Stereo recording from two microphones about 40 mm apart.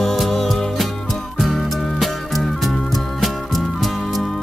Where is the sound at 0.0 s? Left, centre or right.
Centre.